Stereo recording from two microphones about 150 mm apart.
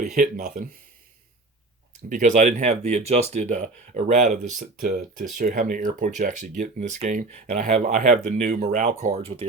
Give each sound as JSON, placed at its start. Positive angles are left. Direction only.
{"t": 0.0, "sound": "speech", "side_deg": -50}
{"t": 2.0, "sound": "speech", "side_deg": -55}